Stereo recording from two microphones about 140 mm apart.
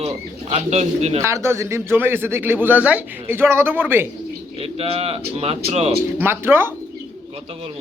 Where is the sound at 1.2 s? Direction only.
20° right (ahead or behind).